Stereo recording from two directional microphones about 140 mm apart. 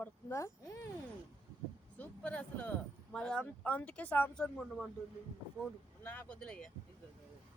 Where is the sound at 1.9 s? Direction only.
10° left (ahead or behind).